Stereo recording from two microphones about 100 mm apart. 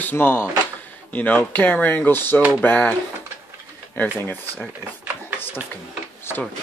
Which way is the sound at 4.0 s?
20° left (ahead or behind).